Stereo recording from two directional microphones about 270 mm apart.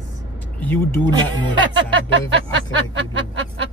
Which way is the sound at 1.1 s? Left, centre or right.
Centre.